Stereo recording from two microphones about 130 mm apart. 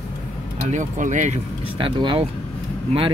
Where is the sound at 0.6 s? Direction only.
65° right (ahead or behind).